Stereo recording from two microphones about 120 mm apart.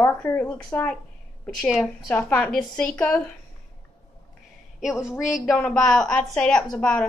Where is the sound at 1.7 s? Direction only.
5° right (ahead or behind).